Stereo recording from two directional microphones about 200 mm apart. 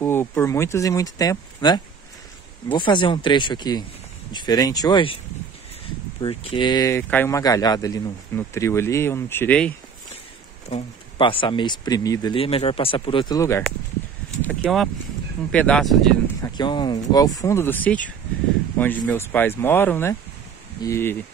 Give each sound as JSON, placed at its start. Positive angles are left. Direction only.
{"t": 0.0, "sound": "speech", "side_deg": 10}
{"t": 6.2, "sound": "speech", "side_deg": 25}
{"t": 10.7, "sound": "speech", "side_deg": 25}
{"t": 14.5, "sound": "speech", "side_deg": 5}
{"t": 16.4, "sound": "speech", "side_deg": 20}